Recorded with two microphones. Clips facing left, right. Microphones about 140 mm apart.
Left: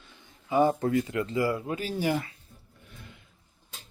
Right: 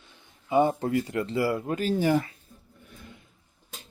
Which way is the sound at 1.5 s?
45° right (ahead or behind).